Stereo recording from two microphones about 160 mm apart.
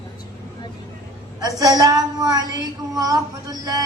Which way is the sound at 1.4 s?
20° right (ahead or behind).